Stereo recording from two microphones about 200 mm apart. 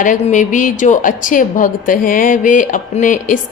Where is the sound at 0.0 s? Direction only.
40° left (ahead or behind).